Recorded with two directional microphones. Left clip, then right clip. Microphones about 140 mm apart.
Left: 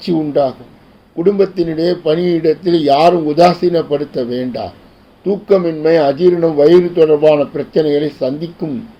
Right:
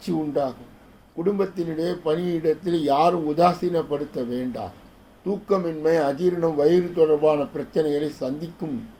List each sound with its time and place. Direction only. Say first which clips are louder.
0.0 s speech: left 11 dB; 20° left (ahead or behind)